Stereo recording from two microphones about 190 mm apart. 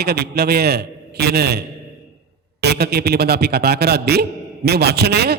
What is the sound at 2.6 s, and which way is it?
A man's voice, 60° right (ahead or behind).